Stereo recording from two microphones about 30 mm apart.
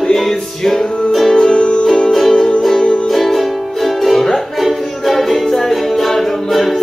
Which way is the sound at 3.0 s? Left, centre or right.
Centre.